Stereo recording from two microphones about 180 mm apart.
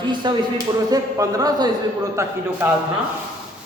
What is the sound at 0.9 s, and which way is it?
Speech, 20° right (ahead or behind).